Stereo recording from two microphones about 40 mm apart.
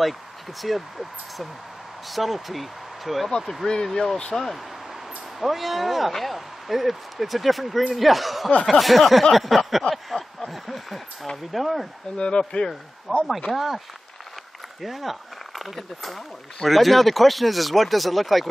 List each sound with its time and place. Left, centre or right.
0.6 s a man's voice: centre
3.6 s speech: centre
5.4 s a man's voice: centre
10.0 s a sound: centre
11.5 s a man's voice: centre
12.2 s speech: left
13.1 s a man's voice: centre
14.8 s a man's voice: centre